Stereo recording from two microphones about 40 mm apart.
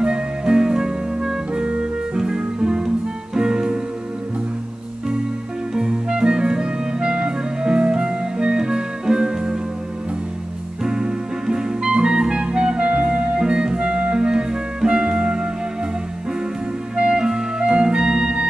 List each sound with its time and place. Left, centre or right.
0.0 s music: right
1.5 s music: right
5.8 s clarinet: right
10.8 s music: centre
16.9 s clarinet: right